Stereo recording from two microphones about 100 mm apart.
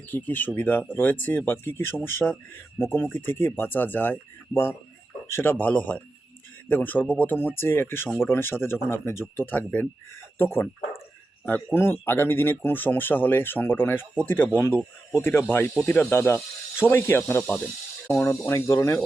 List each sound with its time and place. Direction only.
0.1 s speech: 15° left (ahead or behind)
2.2 s speech: centre (ahead or behind)
2.9 s speech: 20° left (ahead or behind)
18.3 s speech: 30° left (ahead or behind)